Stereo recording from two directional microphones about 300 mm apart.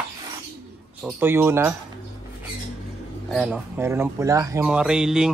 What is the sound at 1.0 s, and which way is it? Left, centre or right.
Speech, centre.